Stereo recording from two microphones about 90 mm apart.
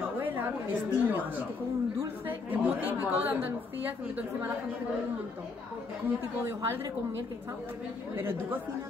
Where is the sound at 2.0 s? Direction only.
20° right (ahead or behind).